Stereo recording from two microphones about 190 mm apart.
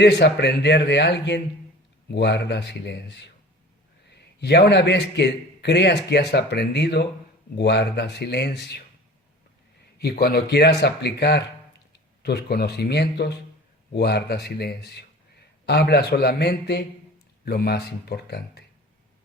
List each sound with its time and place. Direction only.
0.0 s a man's voice: 65° left (ahead or behind)
4.4 s a man's voice: 60° left (ahead or behind)
10.0 s a man's voice: 55° left (ahead or behind)